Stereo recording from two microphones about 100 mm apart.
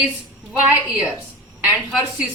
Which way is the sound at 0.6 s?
10° right (ahead or behind).